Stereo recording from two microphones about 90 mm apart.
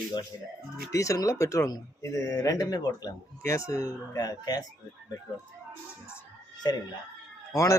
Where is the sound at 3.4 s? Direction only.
35° left (ahead or behind).